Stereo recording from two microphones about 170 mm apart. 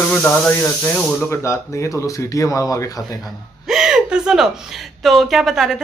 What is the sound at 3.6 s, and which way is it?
Gasp, 5° right (ahead or behind).